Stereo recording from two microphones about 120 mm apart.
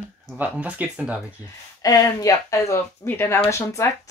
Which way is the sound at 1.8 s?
30° left (ahead or behind).